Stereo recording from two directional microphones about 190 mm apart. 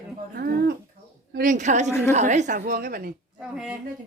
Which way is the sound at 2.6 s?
55° right (ahead or behind).